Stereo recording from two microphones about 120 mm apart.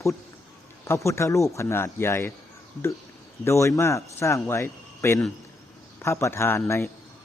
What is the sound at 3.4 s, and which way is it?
A man's voice, 25° left (ahead or behind).